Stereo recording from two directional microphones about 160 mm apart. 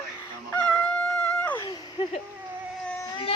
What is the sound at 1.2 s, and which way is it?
Wail, 10° left (ahead or behind).